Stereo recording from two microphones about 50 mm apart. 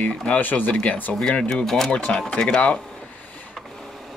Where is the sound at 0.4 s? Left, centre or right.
Left.